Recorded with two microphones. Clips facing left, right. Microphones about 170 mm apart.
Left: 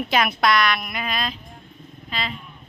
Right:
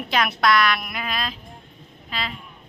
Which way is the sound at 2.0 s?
Centre (ahead or behind).